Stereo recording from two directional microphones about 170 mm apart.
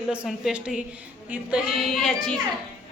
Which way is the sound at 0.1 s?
5° right (ahead or behind).